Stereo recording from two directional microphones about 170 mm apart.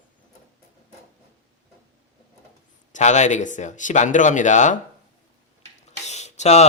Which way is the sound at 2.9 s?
45° left (ahead or behind).